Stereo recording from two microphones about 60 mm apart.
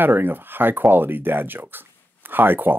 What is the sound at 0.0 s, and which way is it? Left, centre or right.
Speech, right.